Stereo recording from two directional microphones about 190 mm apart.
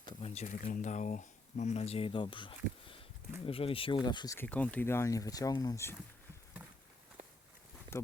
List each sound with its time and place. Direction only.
0.0 s speech: 30° left (ahead or behind)
4.4 s speech: 10° left (ahead or behind)